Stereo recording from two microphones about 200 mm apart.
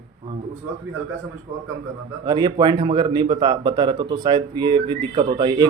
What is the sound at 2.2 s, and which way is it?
Speech, 20° right (ahead or behind).